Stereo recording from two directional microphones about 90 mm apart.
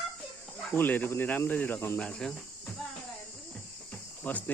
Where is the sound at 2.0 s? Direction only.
10° left (ahead or behind).